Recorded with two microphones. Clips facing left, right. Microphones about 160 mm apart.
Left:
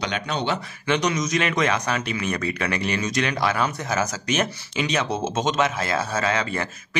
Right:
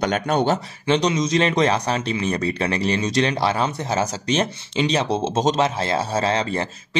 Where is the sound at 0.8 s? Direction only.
30° right (ahead or behind).